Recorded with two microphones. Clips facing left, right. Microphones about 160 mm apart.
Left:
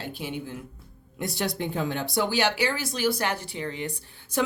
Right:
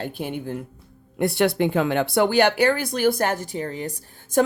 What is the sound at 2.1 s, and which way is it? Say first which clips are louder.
Speech: right 6 dB; 55° right (ahead or behind).